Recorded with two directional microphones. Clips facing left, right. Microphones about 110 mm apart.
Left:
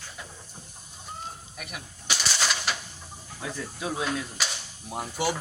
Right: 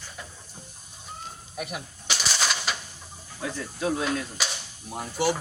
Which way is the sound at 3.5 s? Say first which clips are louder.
Right 4 dB; 5° left (ahead or behind).